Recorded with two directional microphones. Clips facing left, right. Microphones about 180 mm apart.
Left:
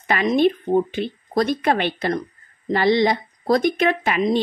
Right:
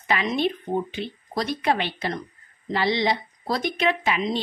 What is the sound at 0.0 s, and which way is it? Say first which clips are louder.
Speech: left 6 dB; 50° left (ahead or behind).